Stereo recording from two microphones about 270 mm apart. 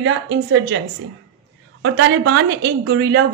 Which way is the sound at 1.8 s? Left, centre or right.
Right.